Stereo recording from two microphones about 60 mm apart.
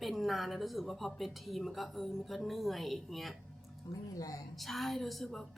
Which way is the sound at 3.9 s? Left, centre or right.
Left.